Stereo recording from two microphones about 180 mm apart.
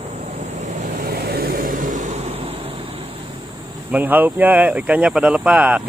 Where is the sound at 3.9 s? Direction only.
10° right (ahead or behind).